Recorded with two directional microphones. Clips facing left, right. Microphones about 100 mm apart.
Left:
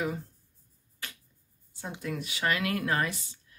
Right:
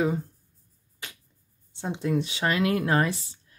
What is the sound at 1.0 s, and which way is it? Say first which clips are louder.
Finger snapping: right 1 dB; 20° right (ahead or behind).